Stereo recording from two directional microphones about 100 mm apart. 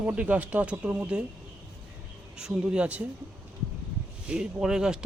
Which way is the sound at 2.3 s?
10° right (ahead or behind).